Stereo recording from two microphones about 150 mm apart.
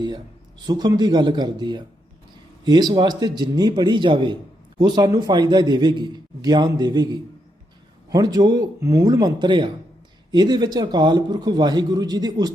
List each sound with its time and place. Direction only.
0.7 s a man's voice: 25° right (ahead or behind)